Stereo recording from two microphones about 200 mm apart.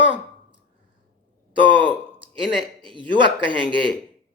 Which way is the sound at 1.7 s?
25° right (ahead or behind).